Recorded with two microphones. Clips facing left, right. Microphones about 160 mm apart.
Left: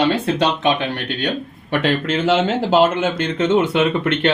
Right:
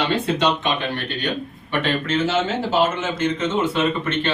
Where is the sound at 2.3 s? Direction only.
60° left (ahead or behind).